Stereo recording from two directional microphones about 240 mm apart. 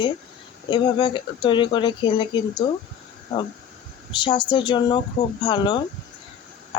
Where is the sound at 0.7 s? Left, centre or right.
Centre.